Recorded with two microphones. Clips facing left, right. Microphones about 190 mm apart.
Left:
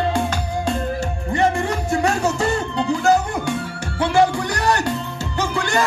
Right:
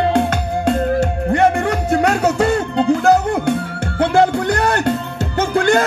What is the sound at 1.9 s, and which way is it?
Music, 65° right (ahead or behind).